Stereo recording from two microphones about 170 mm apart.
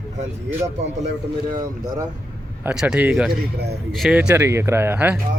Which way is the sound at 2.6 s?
5° right (ahead or behind).